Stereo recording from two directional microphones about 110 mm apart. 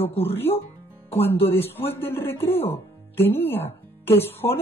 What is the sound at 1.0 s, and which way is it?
A woman's voice, 20° left (ahead or behind).